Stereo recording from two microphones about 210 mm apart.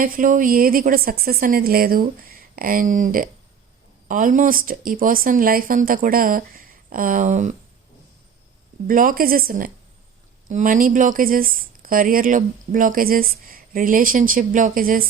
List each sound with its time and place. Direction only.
0.0 s a woman's voice: 40° right (ahead or behind)
8.9 s a woman's voice: 40° right (ahead or behind)